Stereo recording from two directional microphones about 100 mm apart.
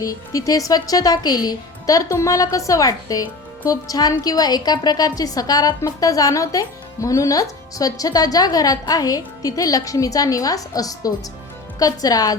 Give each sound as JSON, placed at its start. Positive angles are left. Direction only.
{"t": 0.0, "sound": "a woman's voice", "side_deg": 35}